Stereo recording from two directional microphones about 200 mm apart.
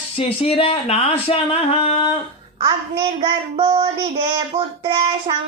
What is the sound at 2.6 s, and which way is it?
Child singing, 20° right (ahead or behind).